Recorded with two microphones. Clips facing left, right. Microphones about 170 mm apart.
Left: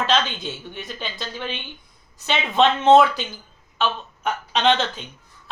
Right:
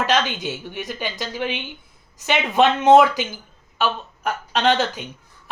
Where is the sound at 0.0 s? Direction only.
10° right (ahead or behind).